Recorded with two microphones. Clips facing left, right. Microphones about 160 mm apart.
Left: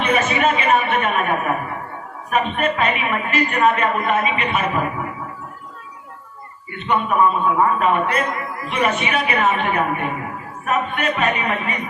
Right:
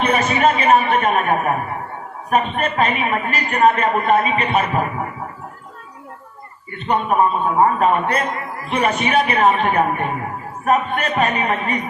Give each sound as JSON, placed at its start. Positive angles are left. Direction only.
{"t": 0.0, "sound": "a woman's voice", "side_deg": -40}
{"t": 6.7, "sound": "a woman's voice", "side_deg": -40}